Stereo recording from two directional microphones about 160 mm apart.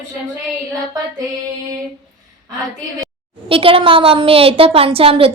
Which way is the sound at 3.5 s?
35° right (ahead or behind).